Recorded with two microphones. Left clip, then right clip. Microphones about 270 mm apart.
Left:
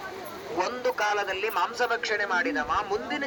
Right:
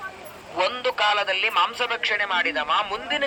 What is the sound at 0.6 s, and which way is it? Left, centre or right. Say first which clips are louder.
Speech: right 5 dB; centre.